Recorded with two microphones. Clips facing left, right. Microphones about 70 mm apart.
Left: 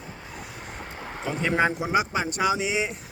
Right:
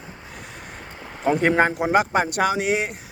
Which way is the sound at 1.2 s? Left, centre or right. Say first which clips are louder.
Right 6 dB; right.